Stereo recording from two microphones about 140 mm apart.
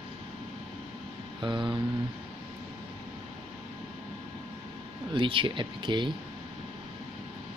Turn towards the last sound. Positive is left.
turn(degrees=-35)  # may be behind; listen again after turning